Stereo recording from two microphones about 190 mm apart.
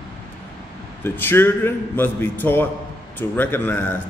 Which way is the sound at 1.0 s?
10° left (ahead or behind).